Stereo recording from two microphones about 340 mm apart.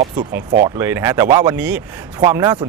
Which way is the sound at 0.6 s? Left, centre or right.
Centre.